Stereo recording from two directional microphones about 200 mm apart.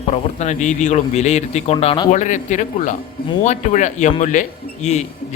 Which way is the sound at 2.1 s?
40° left (ahead or behind).